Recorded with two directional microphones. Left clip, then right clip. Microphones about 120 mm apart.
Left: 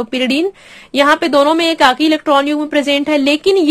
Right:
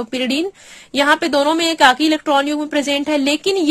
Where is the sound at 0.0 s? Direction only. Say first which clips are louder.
Left 4 dB; 20° right (ahead or behind).